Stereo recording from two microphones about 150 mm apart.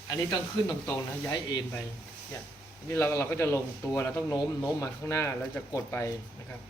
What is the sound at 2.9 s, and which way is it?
Speech, 15° left (ahead or behind).